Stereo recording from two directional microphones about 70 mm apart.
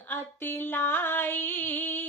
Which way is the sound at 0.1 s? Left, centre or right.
Left.